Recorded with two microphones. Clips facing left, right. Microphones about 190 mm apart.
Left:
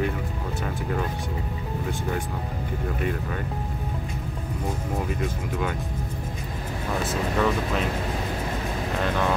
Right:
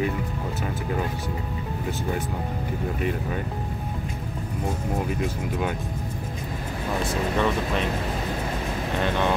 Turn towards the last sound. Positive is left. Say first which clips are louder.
# even
turn(degrees=5)  # may be behind; listen again after turning